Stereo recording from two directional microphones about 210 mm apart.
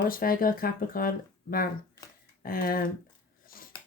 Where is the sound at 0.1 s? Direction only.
45° left (ahead or behind).